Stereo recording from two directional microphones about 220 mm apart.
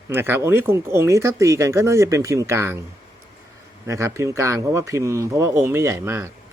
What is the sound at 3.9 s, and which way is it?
Speech, 15° right (ahead or behind).